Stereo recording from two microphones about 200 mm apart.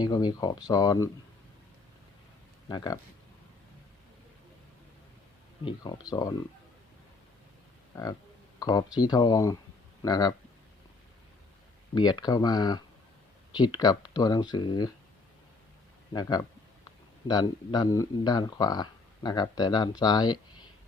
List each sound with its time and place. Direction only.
0.0 s speech: 20° left (ahead or behind)
2.6 s speech: 20° left (ahead or behind)
5.6 s speech: 20° left (ahead or behind)
8.5 s speech: 20° left (ahead or behind)
11.9 s speech: 20° left (ahead or behind)
16.1 s speech: 20° left (ahead or behind)